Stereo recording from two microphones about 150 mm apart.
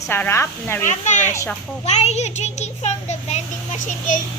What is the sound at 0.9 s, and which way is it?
Speech, 55° left (ahead or behind).